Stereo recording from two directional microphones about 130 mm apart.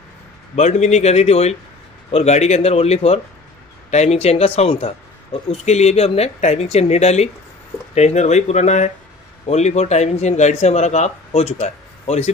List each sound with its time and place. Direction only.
0.6 s a man's voice: 60° left (ahead or behind)